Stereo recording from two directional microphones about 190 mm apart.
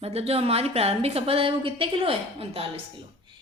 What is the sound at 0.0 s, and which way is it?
A woman's voice, 30° right (ahead or behind).